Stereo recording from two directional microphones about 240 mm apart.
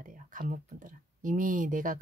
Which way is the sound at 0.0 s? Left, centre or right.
Right.